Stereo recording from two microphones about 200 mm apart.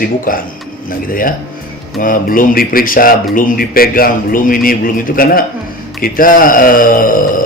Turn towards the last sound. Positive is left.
turn(degrees=45)  # may be behind; listen again after turning